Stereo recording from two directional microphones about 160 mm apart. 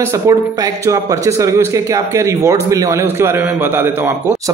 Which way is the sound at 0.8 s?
20° right (ahead or behind).